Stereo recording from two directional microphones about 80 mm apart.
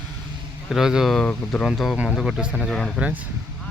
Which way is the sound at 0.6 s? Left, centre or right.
Centre.